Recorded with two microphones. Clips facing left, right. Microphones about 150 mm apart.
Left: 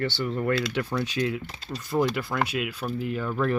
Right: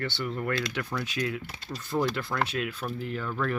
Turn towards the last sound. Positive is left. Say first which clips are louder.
# left 4 dB
turn(degrees=15)  # may be behind; listen again after turning